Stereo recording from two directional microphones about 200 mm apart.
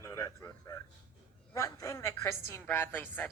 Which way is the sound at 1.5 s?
15° left (ahead or behind).